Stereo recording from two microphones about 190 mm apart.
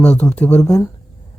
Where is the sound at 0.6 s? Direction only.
20° left (ahead or behind).